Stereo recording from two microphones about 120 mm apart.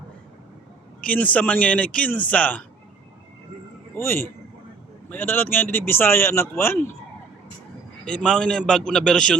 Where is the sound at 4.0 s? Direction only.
20° left (ahead or behind).